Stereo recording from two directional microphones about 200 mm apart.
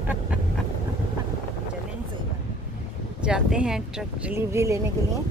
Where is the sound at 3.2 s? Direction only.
5° right (ahead or behind).